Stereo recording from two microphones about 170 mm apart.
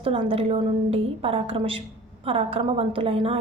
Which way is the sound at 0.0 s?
35° right (ahead or behind).